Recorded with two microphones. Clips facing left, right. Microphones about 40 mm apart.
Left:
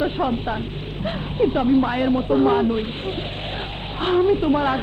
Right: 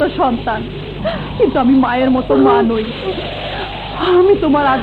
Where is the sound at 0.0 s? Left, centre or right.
Right.